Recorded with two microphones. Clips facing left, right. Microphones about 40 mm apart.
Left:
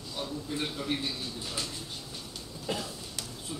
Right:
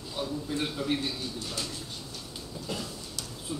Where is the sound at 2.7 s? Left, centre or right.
Left.